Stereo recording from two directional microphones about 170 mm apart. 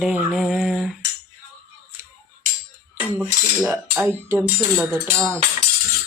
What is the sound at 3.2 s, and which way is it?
Cutlery, 10° right (ahead or behind).